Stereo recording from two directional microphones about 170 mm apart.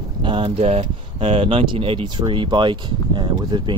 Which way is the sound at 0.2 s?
30° right (ahead or behind).